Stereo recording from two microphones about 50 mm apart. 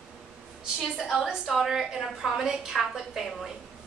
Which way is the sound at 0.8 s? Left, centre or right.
Centre.